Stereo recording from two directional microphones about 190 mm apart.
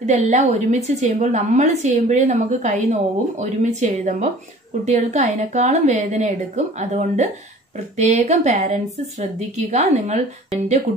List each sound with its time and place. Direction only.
0.0 s a woman's voice: 40° right (ahead or behind)